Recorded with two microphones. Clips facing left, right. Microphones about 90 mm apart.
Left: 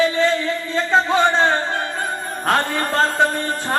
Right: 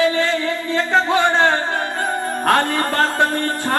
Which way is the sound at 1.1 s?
15° right (ahead or behind).